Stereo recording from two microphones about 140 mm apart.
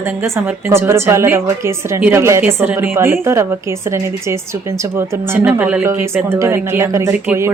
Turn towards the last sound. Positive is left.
turn(degrees=-15)  # may be behind; listen again after turning